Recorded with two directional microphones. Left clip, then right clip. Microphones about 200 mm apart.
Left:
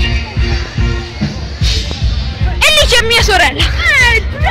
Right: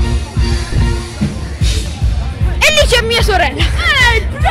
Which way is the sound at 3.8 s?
30° right (ahead or behind).